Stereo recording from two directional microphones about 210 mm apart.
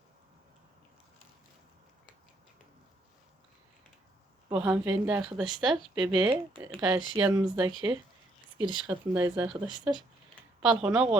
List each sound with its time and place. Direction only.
4.4 s speech: 10° right (ahead or behind)
8.5 s speech: 20° right (ahead or behind)
10.6 s speech: 5° right (ahead or behind)